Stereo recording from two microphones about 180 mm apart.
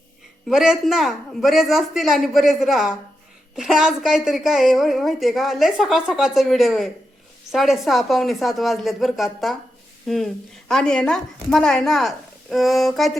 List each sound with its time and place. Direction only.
0.4 s a woman's voice: centre (ahead or behind)